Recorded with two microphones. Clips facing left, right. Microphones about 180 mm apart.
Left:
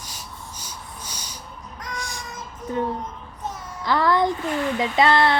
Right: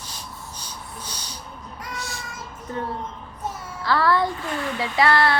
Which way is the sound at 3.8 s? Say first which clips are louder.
Left 1 dB; 20° left (ahead or behind).